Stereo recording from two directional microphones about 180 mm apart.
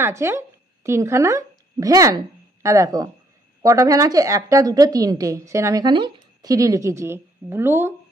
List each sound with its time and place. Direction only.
0.0 s a woman's voice: 15° right (ahead or behind)